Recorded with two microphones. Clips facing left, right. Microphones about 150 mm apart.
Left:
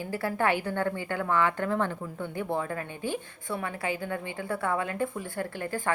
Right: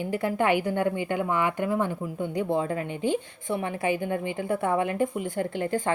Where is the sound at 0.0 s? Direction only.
20° right (ahead or behind).